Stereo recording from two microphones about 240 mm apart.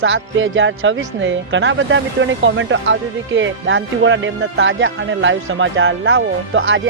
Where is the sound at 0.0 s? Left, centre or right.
Right.